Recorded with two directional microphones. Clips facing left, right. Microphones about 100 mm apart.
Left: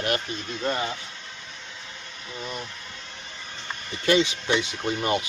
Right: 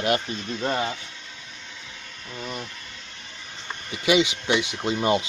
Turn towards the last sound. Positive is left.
turn(degrees=-20)  # may be behind; listen again after turning